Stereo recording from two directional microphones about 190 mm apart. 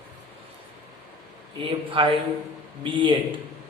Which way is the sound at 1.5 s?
25° right (ahead or behind).